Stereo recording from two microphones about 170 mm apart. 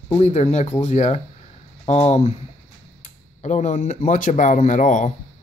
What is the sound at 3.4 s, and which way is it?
Speech, 45° left (ahead or behind).